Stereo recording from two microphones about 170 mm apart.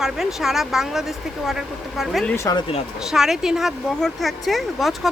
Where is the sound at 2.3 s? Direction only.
20° left (ahead or behind).